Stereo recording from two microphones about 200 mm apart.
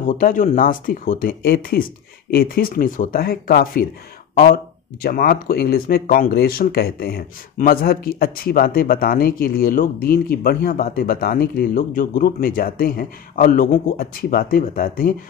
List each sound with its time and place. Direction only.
0.2 s speech: 45° left (ahead or behind)
5.0 s speech: 50° left (ahead or behind)